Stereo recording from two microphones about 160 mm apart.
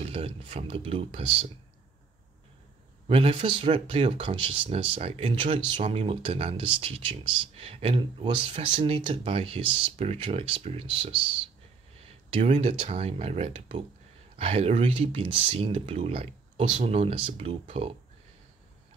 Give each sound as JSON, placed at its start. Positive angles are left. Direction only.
{"t": 0.0, "sound": "speech", "side_deg": -35}
{"t": 3.1, "sound": "speech", "side_deg": -35}
{"t": 12.3, "sound": "speech", "side_deg": -40}